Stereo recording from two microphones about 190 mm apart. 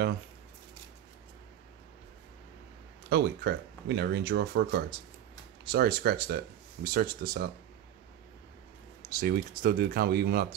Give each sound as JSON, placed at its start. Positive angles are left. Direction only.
{"t": 3.1, "sound": "speech", "side_deg": -60}
{"t": 9.2, "sound": "speech", "side_deg": -50}